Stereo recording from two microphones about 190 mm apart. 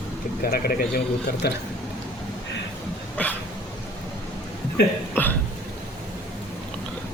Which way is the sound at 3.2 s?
5° left (ahead or behind).